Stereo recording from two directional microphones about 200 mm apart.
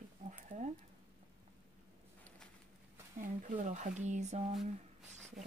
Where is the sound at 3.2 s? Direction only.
40° right (ahead or behind).